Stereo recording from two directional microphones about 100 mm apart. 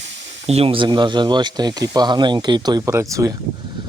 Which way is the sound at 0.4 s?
80° right.